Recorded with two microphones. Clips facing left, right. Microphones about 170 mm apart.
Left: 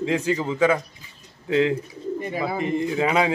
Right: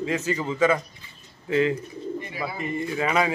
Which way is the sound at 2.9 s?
15° left (ahead or behind).